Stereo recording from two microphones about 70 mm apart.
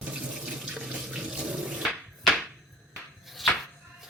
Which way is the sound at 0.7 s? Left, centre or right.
Centre.